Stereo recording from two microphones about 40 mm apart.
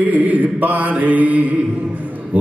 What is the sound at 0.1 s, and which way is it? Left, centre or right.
Mantra, right.